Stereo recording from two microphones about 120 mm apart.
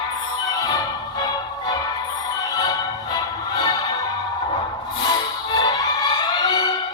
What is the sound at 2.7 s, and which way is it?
Music, 30° left (ahead or behind).